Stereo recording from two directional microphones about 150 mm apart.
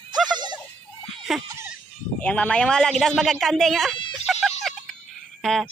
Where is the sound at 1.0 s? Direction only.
Centre (ahead or behind).